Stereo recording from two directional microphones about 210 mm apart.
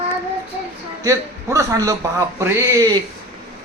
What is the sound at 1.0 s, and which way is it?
A man's voice, 15° right (ahead or behind).